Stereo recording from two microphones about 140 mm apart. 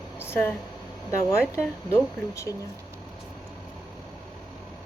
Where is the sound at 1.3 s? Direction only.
20° left (ahead or behind).